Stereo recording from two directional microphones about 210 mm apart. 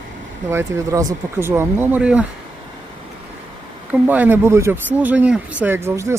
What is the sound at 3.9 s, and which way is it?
Speech, 10° right (ahead or behind).